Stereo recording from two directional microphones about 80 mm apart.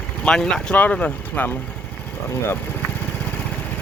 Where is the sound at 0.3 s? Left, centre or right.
Centre.